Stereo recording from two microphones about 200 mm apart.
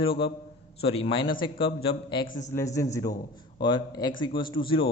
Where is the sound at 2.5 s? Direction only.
15° left (ahead or behind).